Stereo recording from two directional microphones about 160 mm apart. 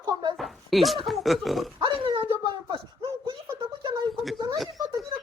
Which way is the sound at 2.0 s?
35° right (ahead or behind).